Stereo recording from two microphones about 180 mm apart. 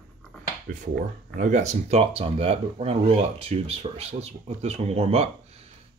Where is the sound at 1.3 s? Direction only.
45° right (ahead or behind).